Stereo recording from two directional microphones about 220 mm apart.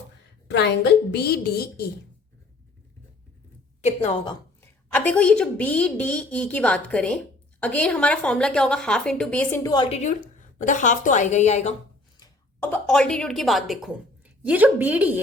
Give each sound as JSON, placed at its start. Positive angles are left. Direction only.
{"t": 0.4, "sound": "a woman's voice", "side_deg": 50}
{"t": 3.8, "sound": "a woman's voice", "side_deg": 25}
{"t": 4.9, "sound": "a woman's voice", "side_deg": 5}
{"t": 9.9, "sound": "a woman's voice", "side_deg": 35}
{"t": 12.2, "sound": "speech", "side_deg": 10}